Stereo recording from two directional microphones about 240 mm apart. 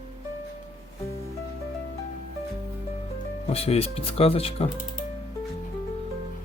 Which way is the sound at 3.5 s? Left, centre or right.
Left.